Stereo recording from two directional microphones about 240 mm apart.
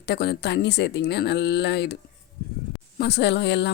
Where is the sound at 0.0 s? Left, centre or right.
Left.